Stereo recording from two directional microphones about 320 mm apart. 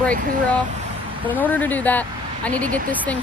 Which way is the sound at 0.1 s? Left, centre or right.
Right.